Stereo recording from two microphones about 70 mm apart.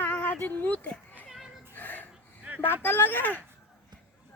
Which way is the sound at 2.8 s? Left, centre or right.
Left.